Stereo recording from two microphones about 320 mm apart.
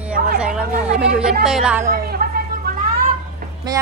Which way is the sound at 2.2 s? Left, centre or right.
Right.